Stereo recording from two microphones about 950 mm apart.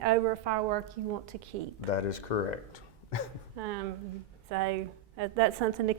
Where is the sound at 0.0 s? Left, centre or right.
Right.